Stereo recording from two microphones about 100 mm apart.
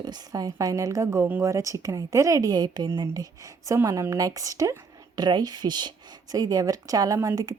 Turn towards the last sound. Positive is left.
turn(degrees=-35)  # may be behind; listen again after turning